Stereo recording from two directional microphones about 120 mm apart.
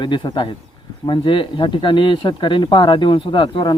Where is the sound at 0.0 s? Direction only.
40° left (ahead or behind).